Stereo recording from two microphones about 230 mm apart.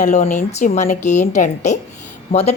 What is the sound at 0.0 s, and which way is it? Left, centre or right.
A woman's voice, left.